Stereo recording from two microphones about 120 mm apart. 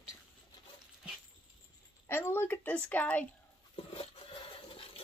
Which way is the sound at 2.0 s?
20° left (ahead or behind).